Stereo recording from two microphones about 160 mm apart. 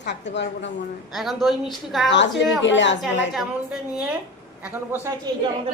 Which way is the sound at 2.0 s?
90° left.